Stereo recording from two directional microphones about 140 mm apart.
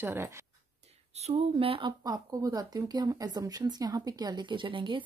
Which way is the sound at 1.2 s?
40° right (ahead or behind).